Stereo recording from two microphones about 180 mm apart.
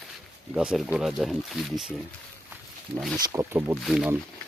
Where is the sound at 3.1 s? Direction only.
20° right (ahead or behind).